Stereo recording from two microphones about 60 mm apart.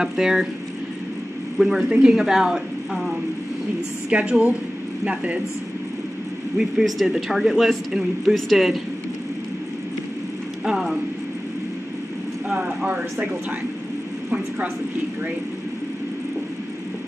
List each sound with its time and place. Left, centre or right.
0.0 s a woman's voice: centre
1.6 s speech: centre
1.9 s a woman's voice: centre
4.1 s a woman's voice: centre
6.6 s speech: centre
10.6 s speech: centre
12.5 s speech: right